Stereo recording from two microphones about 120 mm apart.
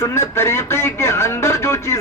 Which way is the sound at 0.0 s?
20° left (ahead or behind).